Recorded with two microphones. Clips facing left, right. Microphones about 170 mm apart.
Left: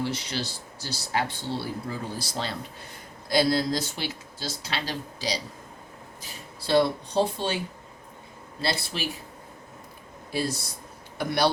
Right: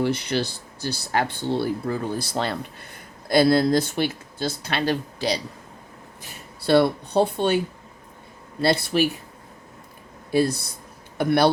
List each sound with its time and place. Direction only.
0.0 s speech: 60° right (ahead or behind)
8.6 s speech: 55° right (ahead or behind)
10.3 s speech: 55° right (ahead or behind)